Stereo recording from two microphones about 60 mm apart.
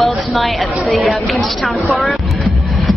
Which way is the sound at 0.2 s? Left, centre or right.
Centre.